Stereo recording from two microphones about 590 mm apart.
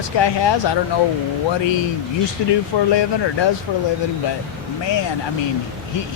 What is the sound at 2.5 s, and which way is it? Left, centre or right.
Speech, left.